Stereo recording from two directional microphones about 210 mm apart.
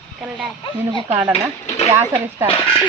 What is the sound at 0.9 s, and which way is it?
Speech, 25° right (ahead or behind).